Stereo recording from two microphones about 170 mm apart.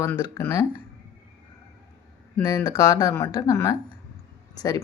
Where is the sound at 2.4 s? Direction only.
25° left (ahead or behind).